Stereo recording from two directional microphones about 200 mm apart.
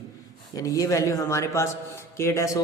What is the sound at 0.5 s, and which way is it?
A woman's voice, 15° left (ahead or behind).